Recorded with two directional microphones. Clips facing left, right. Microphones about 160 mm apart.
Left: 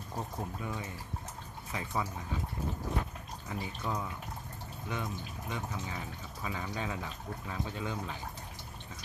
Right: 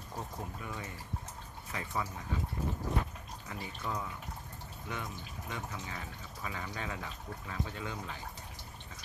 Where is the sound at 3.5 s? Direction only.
15° left (ahead or behind).